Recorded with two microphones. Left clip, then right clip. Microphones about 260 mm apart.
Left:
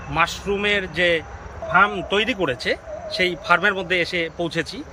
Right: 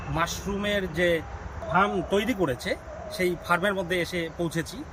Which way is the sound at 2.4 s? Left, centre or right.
Centre.